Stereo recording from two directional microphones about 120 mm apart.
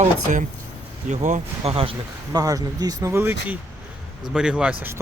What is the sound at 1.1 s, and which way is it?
Speech, 85° right.